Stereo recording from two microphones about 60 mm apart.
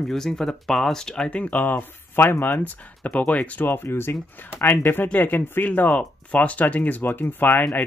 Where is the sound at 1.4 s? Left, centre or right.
Left.